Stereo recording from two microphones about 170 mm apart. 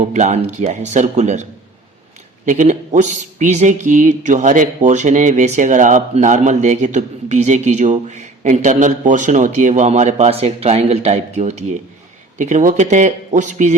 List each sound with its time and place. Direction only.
0.0 s speech: 45° right (ahead or behind)
2.5 s speech: 45° right (ahead or behind)